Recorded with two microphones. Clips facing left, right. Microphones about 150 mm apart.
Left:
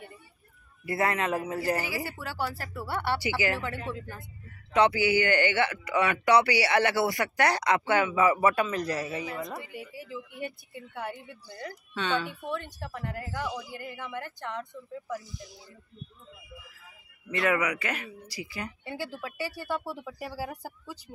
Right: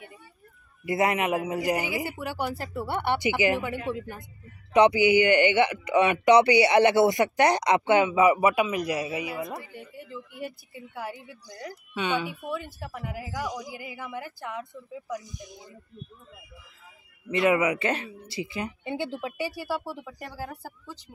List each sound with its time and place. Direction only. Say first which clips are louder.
0.8 s speech: right 3 dB; 20° right (ahead or behind)
9.6 s speech: left 1 dB; 10° left (ahead or behind); by 15.6 s 20° right (ahead or behind)
17.3 s speech: right 5 dB; 20° right (ahead or behind)
19.8 s speech: left 1 dB; centre (ahead or behind)